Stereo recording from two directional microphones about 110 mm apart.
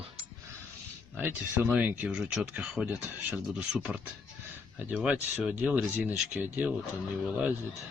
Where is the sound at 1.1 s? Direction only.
20° right (ahead or behind).